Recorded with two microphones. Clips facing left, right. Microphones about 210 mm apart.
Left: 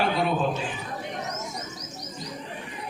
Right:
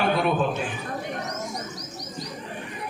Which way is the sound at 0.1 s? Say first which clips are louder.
Right 2 dB; 55° right (ahead or behind).